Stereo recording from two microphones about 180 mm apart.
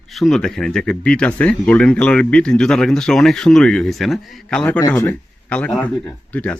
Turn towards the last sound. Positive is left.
turn(degrees=10)  # may be behind; listen again after turning